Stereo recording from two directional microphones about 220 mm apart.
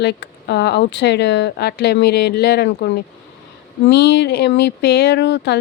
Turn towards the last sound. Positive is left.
turn(degrees=50)  # may be behind; listen again after turning